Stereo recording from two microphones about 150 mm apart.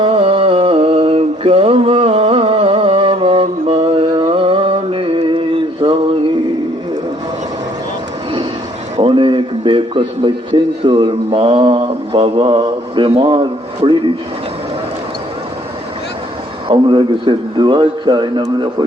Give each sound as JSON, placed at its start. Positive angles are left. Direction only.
{"t": 0.0, "sound": "mantra", "side_deg": -40}
{"t": 4.1, "sound": "a sound", "side_deg": -25}
{"t": 4.4, "sound": "mantra", "side_deg": -40}
{"t": 9.0, "sound": "a sound", "side_deg": -35}
{"t": 10.8, "sound": "mantra", "side_deg": -35}
{"t": 16.6, "sound": "mantra", "side_deg": -30}